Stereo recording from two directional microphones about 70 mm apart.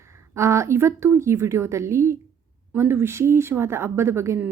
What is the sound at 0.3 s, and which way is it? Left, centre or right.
A woman's voice, right.